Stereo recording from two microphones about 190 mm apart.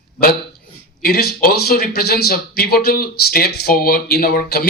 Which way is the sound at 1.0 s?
55° left (ahead or behind).